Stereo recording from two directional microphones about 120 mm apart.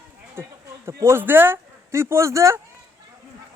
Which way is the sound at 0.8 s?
20° right (ahead or behind).